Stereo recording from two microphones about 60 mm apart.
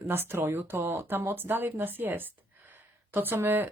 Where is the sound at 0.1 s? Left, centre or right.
Right.